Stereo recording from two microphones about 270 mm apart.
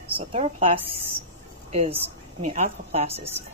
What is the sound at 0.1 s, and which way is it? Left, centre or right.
A woman's voice, right.